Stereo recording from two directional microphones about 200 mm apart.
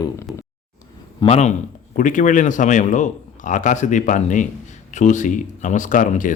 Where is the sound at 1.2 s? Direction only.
35° left (ahead or behind).